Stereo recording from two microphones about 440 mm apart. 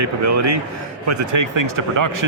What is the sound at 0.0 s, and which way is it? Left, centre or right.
Speech, right.